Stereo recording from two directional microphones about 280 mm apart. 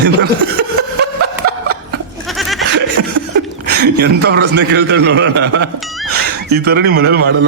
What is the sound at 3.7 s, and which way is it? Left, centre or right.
A man's voice, right.